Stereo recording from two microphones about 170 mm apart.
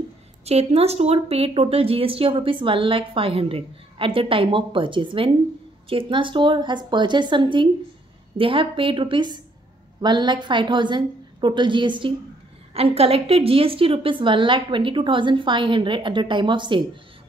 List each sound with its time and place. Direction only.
0.5 s a woman's voice: 40° right (ahead or behind)